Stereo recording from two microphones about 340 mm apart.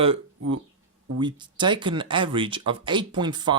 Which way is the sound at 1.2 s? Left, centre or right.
Centre.